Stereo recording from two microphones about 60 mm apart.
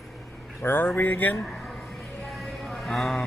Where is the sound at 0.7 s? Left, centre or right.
Left.